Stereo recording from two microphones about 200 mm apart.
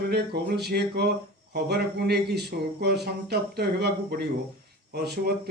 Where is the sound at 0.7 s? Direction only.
55° right (ahead or behind).